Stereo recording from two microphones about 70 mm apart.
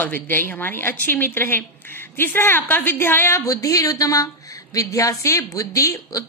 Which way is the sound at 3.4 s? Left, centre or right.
Left.